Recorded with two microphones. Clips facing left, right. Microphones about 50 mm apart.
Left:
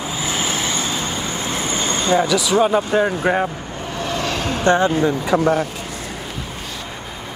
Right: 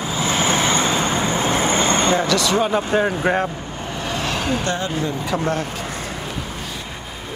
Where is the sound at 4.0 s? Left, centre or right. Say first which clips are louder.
Left 1 dB; centre.